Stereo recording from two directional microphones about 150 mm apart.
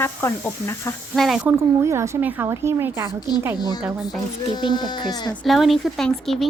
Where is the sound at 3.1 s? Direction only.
25° left (ahead or behind).